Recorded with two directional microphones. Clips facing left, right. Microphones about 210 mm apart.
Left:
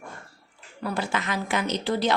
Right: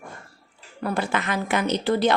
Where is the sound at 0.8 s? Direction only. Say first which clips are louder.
Right 3 dB; 55° right (ahead or behind).